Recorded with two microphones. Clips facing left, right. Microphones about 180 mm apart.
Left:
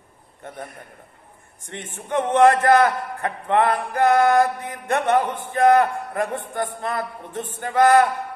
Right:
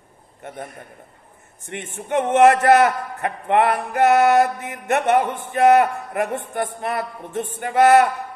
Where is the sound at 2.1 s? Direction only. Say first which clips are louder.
Right 2 dB; 15° right (ahead or behind).